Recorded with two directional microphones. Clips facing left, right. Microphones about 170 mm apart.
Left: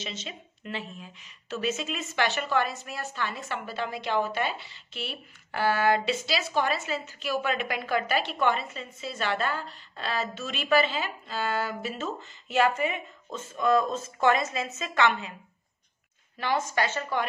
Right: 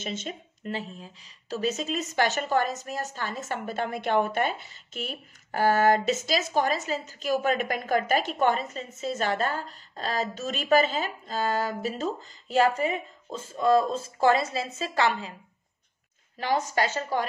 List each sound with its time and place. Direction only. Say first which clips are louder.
0.0 s speech: right 5 dB; 50° right (ahead or behind); by 15.3 s 35° right (ahead or behind)
16.3 s speech: right 2 dB; 35° right (ahead or behind)